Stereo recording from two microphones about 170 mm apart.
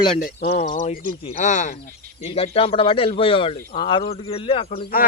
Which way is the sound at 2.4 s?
35° left (ahead or behind).